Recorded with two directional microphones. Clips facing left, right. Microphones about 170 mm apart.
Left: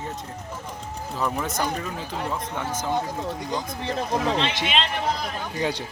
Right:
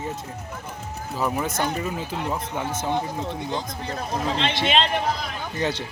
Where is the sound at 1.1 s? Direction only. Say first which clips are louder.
Right 2 dB; 5° right (ahead or behind).